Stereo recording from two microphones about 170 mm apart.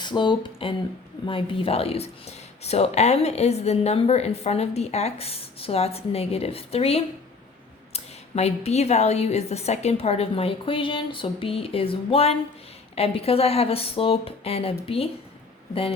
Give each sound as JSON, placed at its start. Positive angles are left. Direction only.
{"t": 0.0, "sound": "speech", "side_deg": 25}